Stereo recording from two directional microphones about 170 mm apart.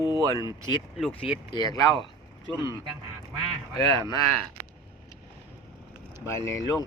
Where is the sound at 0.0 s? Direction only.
20° left (ahead or behind).